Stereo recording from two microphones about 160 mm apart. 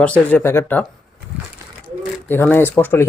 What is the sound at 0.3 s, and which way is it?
Speech, 10° left (ahead or behind).